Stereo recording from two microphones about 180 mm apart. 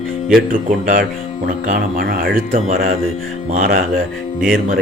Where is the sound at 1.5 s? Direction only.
50° right (ahead or behind).